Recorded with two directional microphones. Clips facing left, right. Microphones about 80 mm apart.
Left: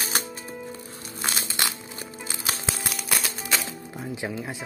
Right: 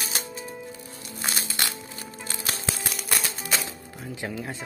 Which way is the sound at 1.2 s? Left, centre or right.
Centre.